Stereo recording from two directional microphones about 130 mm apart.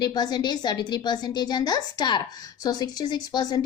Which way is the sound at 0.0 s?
35° left (ahead or behind).